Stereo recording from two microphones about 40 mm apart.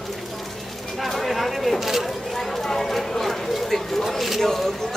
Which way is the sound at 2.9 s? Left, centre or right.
Centre.